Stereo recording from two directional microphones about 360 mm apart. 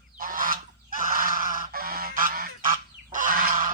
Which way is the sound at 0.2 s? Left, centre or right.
Right.